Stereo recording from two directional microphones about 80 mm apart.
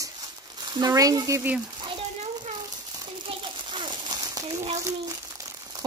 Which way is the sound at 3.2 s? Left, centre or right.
Right.